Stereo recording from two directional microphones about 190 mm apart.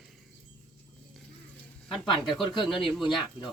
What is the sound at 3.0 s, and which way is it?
Speech, 25° left (ahead or behind).